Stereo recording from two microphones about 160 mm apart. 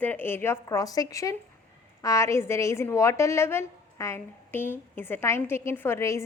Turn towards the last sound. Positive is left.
turn(degrees=20)  # may be behind; listen again after turning